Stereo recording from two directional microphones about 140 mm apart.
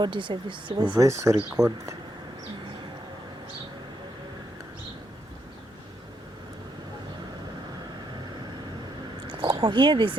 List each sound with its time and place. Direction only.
0.0 s speech: 35° right (ahead or behind)
0.9 s speech: 20° right (ahead or behind)
9.2 s a sound: 35° right (ahead or behind)